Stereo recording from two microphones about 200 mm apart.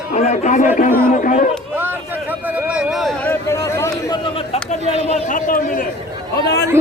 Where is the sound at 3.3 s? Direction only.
15° left (ahead or behind).